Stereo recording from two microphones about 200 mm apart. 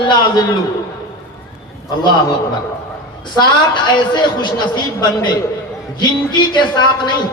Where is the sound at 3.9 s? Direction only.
20° left (ahead or behind).